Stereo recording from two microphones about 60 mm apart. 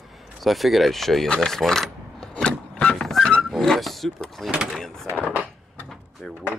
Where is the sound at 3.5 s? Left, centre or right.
Centre.